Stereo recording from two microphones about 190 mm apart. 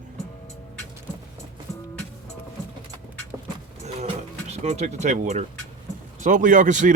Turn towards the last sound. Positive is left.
turn(degrees=-40)  # may be behind; listen again after turning